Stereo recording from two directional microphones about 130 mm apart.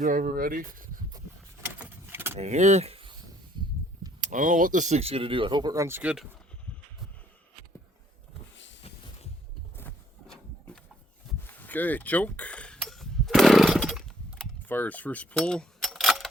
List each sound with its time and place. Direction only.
0.0 s speech: 90° right
1.6 s vehicle: 15° right (ahead or behind)
2.4 s speech: 60° right (ahead or behind)
4.2 s speech: 80° right; by 6.0 s 25° right (ahead or behind)
6.0 s speech: 10° right (ahead or behind)
8.8 s a sound: 50° left (ahead or behind)
11.3 s a sound: 15° left (ahead or behind)
14.7 s speech: 15° left (ahead or behind)